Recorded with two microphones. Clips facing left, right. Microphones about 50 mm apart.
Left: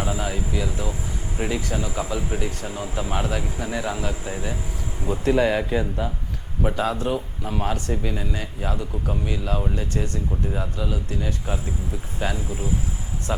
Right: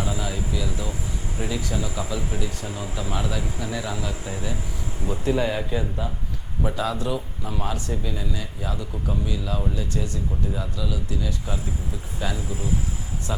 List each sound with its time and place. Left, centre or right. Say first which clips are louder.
0.0 s speech: left 2 dB; left
2.6 s speech: left 2 dB; left
2.9 s speech: left 3 dB; left
5.2 s speech: left 4 dB; left
6.6 s speech: left 2 dB; left